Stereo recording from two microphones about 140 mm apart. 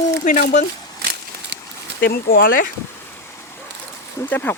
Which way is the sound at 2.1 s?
90° left.